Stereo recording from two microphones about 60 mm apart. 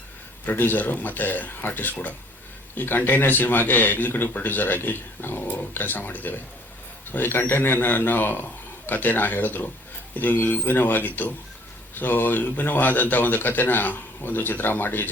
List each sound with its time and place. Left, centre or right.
0.4 s a man's voice: left